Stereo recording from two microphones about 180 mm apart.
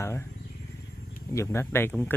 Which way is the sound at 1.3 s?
15° left (ahead or behind).